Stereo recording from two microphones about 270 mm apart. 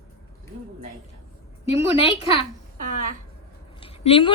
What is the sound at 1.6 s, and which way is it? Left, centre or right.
Speech, left.